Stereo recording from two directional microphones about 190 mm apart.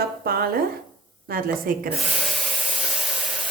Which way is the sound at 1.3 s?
50° right (ahead or behind).